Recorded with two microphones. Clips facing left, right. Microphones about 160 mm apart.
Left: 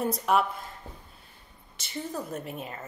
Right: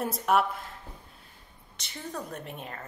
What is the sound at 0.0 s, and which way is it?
Speech, centre (ahead or behind).